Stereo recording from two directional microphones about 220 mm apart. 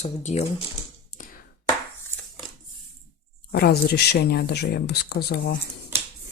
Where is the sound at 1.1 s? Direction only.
30° left (ahead or behind).